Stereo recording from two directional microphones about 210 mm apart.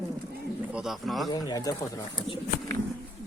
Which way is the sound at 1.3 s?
20° left (ahead or behind).